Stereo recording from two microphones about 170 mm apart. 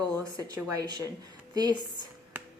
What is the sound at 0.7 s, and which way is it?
A woman's voice, 25° right (ahead or behind).